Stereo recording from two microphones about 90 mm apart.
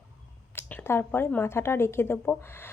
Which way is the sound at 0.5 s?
20° left (ahead or behind).